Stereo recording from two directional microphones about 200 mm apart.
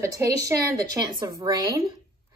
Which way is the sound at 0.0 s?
15° right (ahead or behind).